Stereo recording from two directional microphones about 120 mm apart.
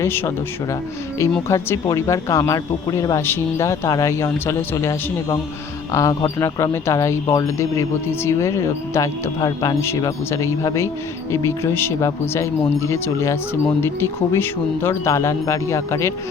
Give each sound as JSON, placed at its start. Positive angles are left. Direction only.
{"t": 0.0, "sound": "speech", "side_deg": 20}
{"t": 1.5, "sound": "speech", "side_deg": 25}